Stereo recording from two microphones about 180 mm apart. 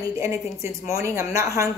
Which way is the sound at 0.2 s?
15° right (ahead or behind).